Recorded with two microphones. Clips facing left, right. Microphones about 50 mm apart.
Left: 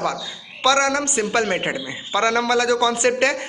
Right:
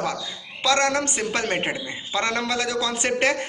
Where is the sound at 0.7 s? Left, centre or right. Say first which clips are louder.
Left 3 dB; left.